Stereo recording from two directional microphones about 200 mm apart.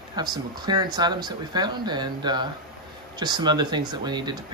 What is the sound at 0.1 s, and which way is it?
Speech, 20° right (ahead or behind).